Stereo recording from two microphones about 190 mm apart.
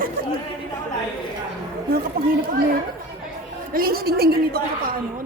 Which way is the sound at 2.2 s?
50° right (ahead or behind).